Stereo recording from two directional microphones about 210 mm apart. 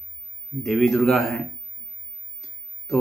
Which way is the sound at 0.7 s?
Centre (ahead or behind).